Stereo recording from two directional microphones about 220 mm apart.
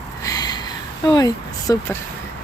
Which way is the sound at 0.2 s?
15° left (ahead or behind).